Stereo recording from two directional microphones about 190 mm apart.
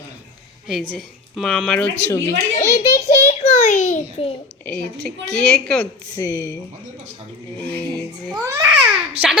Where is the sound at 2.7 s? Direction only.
35° left (ahead or behind).